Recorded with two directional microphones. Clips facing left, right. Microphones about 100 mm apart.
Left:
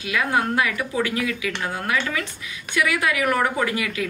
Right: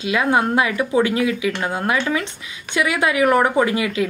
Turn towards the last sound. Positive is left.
turn(degrees=-25)  # may be behind; listen again after turning